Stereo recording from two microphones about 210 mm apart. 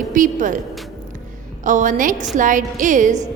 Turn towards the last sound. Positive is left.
turn(degrees=-35)  # may be behind; listen again after turning